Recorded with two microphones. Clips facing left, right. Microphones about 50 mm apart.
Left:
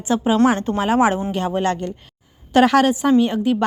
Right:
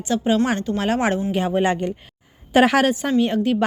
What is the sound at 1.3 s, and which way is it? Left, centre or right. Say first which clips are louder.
A woman's voice: right 1 dB; centre.